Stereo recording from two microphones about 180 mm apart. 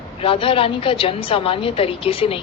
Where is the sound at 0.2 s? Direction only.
30° left (ahead or behind).